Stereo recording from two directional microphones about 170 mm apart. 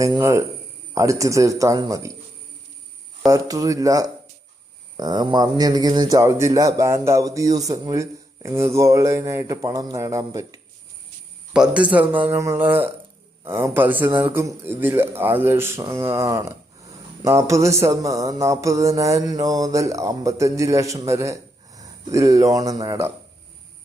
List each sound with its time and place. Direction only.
0.0 s mantra: 20° right (ahead or behind)
3.3 s mantra: 20° right (ahead or behind)
11.5 s speech: 5° right (ahead or behind)
17.2 s mantra: 15° right (ahead or behind)